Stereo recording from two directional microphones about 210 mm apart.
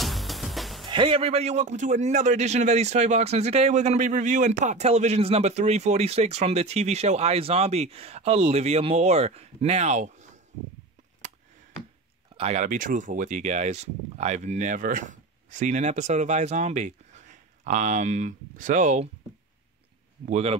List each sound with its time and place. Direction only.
0.0 s music: centre (ahead or behind)
0.8 s a man's voice: 25° right (ahead or behind)
12.4 s a man's voice: 30° right (ahead or behind)
20.2 s a man's voice: 30° right (ahead or behind)